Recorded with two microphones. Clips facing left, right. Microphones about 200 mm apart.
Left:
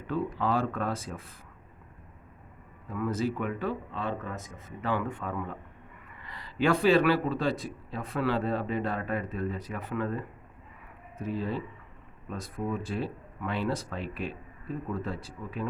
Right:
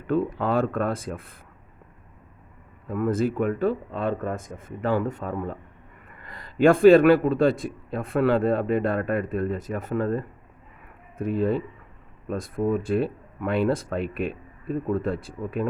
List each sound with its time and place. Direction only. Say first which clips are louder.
0.1 s speech: right 5 dB; 55° right (ahead or behind)
2.9 s a man's voice: right 6 dB; 55° right (ahead or behind)
11.2 s speech: right 8 dB; 55° right (ahead or behind)